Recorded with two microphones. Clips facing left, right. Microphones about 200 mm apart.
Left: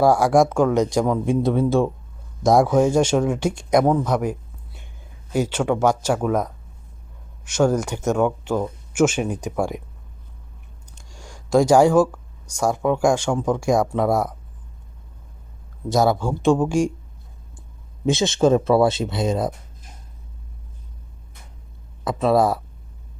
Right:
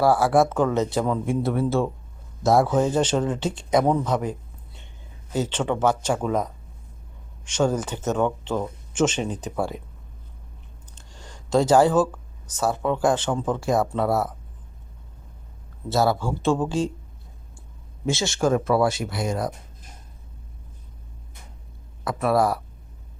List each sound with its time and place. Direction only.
0.0 s speech: 15° left (ahead or behind)
3.9 s a sound: 10° left (ahead or behind)
5.3 s speech: 10° left (ahead or behind)
10.9 s speech: 10° left (ahead or behind)
15.9 s speech: 15° left (ahead or behind)
18.0 s speech: 20° left (ahead or behind)
22.0 s speech: 20° left (ahead or behind)